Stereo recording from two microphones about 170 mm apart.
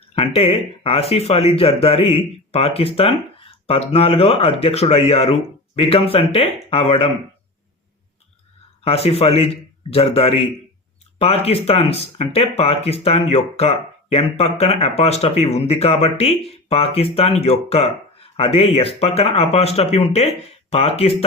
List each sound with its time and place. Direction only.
0.2 s speech: 35° left (ahead or behind)
8.8 s speech: 35° left (ahead or behind)